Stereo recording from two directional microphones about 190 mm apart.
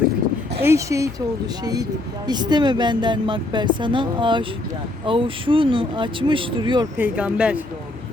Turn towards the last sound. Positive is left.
turn(degrees=-5)  # may be behind; listen again after turning